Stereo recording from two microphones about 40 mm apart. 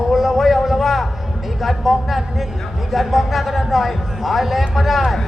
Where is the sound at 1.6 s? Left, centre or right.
Centre.